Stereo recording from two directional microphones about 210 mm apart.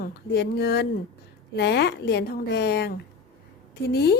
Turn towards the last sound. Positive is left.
turn(degrees=50)  # may be behind; listen again after turning